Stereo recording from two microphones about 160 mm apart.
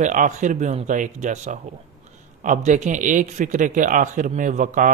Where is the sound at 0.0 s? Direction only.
50° right (ahead or behind).